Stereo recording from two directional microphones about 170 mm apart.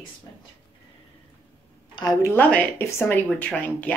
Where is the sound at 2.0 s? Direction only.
25° left (ahead or behind).